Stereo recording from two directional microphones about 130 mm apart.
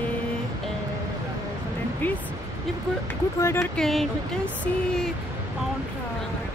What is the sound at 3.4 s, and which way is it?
Speech, 20° left (ahead or behind).